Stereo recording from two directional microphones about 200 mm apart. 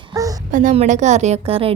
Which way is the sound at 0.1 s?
15° right (ahead or behind).